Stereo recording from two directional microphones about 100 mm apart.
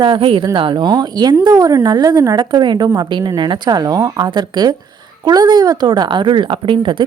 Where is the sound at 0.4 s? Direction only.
50° right (ahead or behind).